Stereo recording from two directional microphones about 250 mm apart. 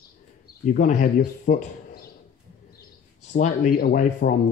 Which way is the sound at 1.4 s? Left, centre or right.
Left.